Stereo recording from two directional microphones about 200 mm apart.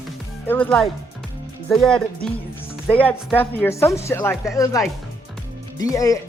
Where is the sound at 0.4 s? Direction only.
10° left (ahead or behind).